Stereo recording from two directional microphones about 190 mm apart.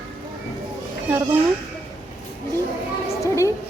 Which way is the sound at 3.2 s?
15° left (ahead or behind).